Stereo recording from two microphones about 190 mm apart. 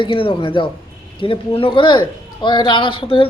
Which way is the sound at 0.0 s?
25° left (ahead or behind).